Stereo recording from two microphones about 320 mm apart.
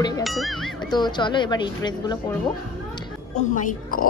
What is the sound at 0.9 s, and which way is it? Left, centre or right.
Speech, centre.